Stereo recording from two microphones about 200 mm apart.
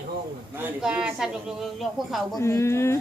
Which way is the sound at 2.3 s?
15° left (ahead or behind).